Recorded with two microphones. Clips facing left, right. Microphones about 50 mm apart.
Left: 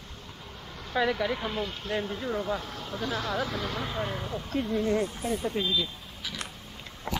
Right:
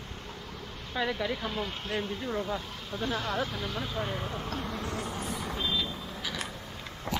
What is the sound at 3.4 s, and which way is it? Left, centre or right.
Speech, left.